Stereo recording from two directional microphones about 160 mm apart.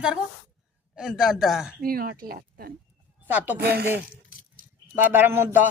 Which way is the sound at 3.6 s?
75° right (ahead or behind).